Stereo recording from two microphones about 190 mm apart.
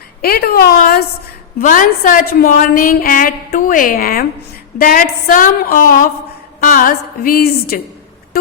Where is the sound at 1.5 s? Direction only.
45° left (ahead or behind).